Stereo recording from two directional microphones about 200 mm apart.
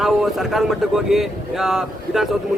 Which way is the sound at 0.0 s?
Centre (ahead or behind).